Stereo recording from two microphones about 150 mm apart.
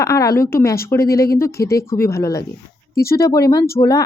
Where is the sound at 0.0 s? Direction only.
20° left (ahead or behind).